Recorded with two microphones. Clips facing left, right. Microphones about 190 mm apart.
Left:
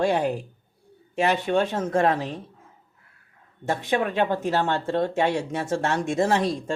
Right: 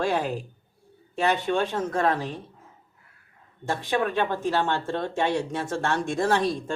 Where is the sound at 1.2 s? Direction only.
20° left (ahead or behind).